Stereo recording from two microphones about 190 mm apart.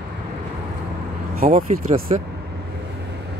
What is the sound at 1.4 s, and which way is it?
Speech, 45° right (ahead or behind).